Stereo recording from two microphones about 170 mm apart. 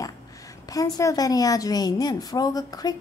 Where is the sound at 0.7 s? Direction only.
20° left (ahead or behind).